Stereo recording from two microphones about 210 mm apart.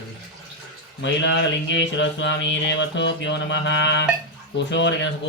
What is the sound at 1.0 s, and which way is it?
Speech, 60° left (ahead or behind).